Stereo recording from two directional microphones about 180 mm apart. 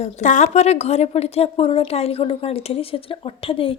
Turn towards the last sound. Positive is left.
turn(degrees=30)  # may be behind; listen again after turning